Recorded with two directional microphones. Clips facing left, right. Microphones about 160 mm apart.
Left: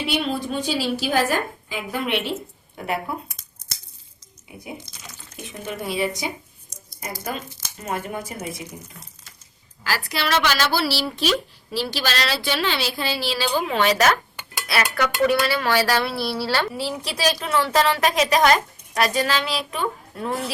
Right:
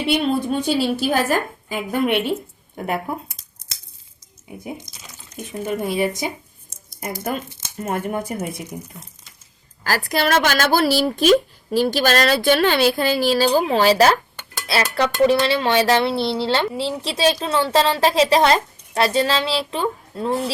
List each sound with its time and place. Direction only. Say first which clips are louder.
0.6 s a woman's voice: right 4 dB; 55° right (ahead or behind)
5.4 s a woman's voice: right 7 dB; 45° right (ahead or behind)
7.9 s a woman's voice: right 4 dB; 50° right (ahead or behind)
9.8 s a woman's voice: right 5 dB; 45° right (ahead or behind); by 20.4 s 30° right (ahead or behind)